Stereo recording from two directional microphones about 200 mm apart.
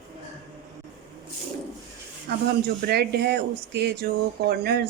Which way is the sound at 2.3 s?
50° right (ahead or behind).